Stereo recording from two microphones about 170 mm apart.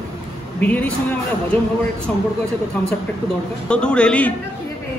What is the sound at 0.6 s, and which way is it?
Speech, 10° left (ahead or behind).